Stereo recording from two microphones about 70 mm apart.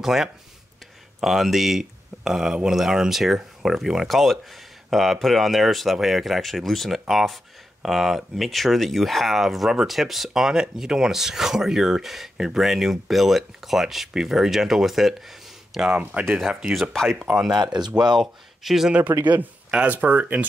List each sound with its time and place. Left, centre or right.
0.0 s speech: centre
16.0 s speech: right
16.3 s speech: centre
16.9 s speech: centre
18.9 s speech: right